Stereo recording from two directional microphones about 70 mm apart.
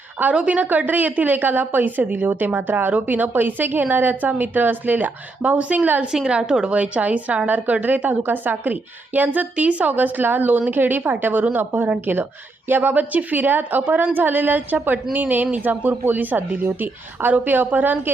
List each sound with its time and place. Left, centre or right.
0.2 s a woman's voice: right